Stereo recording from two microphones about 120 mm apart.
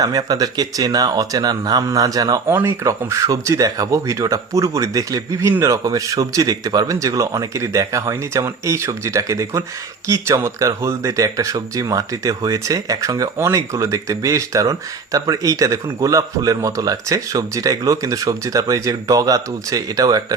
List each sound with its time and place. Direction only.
0.0 s speech: 30° right (ahead or behind)
2.5 s speech: 20° right (ahead or behind)